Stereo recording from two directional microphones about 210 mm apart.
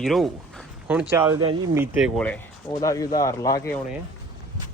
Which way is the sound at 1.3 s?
15° right (ahead or behind).